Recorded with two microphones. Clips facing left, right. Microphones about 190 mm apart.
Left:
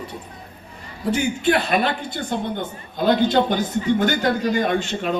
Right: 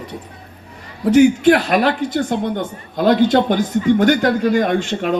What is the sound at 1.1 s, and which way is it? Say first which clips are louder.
A man's voice: right 9 dB; 80° right.